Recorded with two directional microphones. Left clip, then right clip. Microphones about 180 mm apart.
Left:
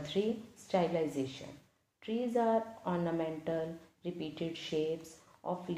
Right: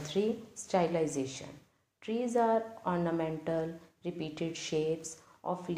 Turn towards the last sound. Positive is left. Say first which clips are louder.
# right 2 dB
turn(degrees=-25)  # may be behind; listen again after turning